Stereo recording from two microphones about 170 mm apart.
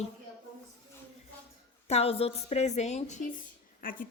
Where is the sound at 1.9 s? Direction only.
35° left (ahead or behind).